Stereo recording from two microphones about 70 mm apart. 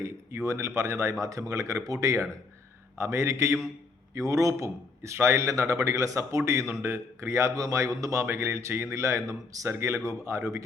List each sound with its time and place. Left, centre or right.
0.0 s a man's voice: right
3.0 s a man's voice: right
4.1 s a man's voice: right
9.6 s a man's voice: right